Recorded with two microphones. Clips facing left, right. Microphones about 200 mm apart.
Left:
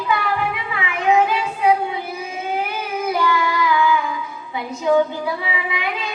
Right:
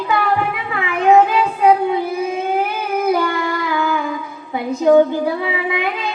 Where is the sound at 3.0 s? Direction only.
50° right (ahead or behind).